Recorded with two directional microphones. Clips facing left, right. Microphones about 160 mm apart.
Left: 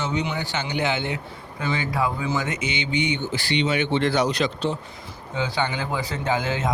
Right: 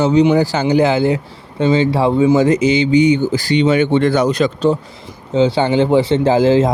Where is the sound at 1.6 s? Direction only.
25° right (ahead or behind); by 4.7 s 50° right (ahead or behind).